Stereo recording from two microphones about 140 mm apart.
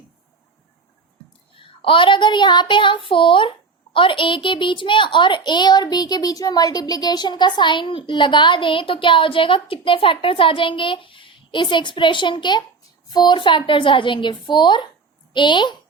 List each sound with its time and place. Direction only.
1.8 s a child's voice: 40° left (ahead or behind)